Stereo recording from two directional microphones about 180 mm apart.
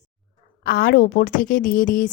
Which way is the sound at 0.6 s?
60° left (ahead or behind).